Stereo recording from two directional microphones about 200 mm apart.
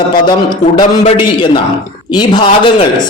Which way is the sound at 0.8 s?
25° left (ahead or behind).